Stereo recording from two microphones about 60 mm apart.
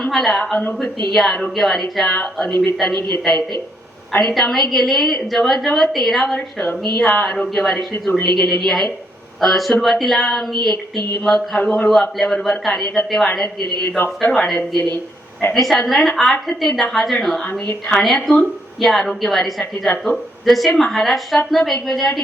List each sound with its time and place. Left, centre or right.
0.0 s a woman's voice: centre
4.4 s a woman's voice: centre
11.6 s a man's voice: left
12.1 s a woman's voice: centre